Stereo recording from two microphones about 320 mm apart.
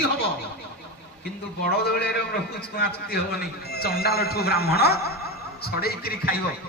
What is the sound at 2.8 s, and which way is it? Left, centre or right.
A man's voice, left.